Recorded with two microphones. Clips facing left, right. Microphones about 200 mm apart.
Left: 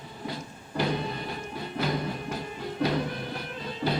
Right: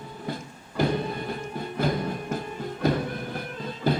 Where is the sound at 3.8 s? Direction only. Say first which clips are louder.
Right 3 dB; 40° left (ahead or behind).